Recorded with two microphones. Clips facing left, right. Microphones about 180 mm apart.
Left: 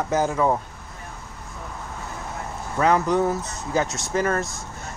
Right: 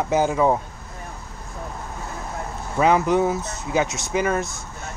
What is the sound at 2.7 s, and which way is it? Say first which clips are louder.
Speech: right 2 dB; 15° right (ahead or behind).